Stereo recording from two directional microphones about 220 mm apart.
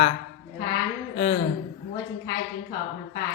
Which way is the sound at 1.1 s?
30° left (ahead or behind).